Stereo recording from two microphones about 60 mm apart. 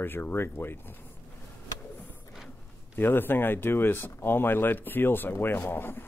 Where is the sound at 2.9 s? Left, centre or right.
Left.